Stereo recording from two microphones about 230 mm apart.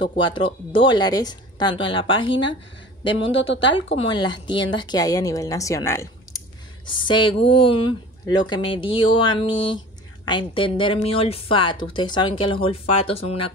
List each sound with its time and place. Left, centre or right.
0.0 s speech: left
3.7 s speech: left